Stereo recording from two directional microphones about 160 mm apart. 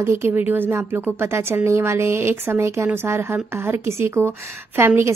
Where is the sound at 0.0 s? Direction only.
15° right (ahead or behind).